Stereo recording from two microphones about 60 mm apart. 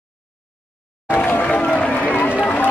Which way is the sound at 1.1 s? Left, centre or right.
Left.